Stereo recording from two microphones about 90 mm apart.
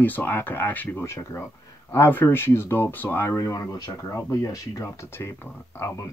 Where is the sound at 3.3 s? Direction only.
40° left (ahead or behind).